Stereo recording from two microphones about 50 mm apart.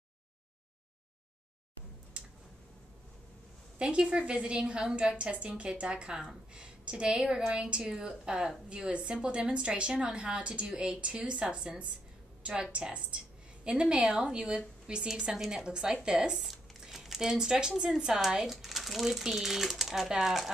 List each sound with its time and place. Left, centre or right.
3.7 s a woman's voice: right